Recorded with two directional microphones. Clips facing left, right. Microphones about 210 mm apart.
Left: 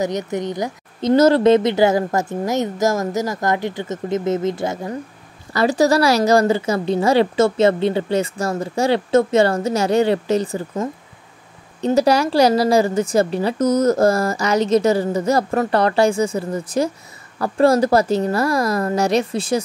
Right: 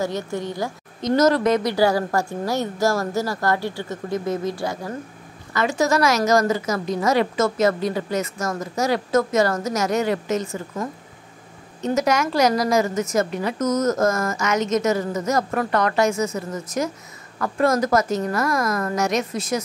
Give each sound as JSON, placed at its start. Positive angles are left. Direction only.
{"t": 0.0, "sound": "a woman's voice", "side_deg": 20}
{"t": 1.0, "sound": "a woman's voice", "side_deg": 30}
{"t": 5.5, "sound": "a woman's voice", "side_deg": 35}